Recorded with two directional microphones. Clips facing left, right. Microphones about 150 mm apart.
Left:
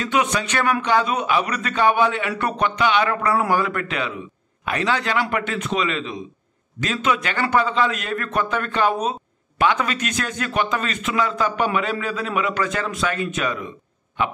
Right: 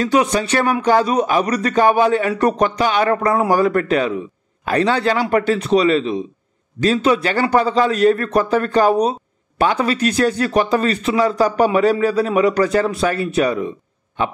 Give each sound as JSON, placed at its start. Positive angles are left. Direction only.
{"t": 0.0, "sound": "speech", "side_deg": -35}